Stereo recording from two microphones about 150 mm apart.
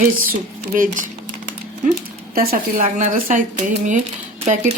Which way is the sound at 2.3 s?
85° right.